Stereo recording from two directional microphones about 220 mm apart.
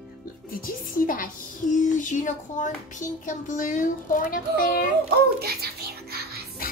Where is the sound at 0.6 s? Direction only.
40° left (ahead or behind).